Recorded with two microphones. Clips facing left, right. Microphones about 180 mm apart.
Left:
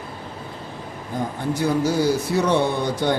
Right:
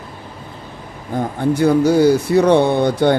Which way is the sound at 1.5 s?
60° right (ahead or behind).